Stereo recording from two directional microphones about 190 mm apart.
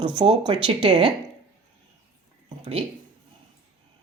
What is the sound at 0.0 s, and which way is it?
Speech, 25° right (ahead or behind).